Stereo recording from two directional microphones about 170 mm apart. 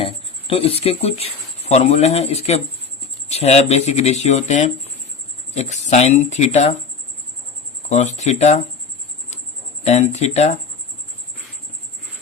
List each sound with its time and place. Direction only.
0.0 s speech: 35° left (ahead or behind)
7.9 s speech: 40° left (ahead or behind)
9.8 s speech: 40° left (ahead or behind)